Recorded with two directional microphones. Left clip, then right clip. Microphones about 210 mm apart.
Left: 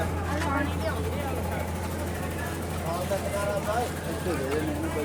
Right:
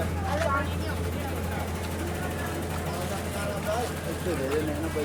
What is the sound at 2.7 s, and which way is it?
Vehicle, centre (ahead or behind).